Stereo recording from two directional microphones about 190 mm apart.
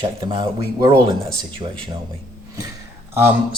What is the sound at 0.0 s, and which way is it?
Speech, 25° right (ahead or behind).